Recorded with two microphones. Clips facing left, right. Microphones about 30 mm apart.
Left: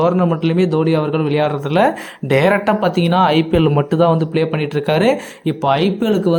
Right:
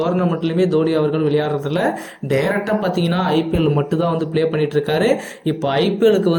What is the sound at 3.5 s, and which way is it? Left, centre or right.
Speech, left.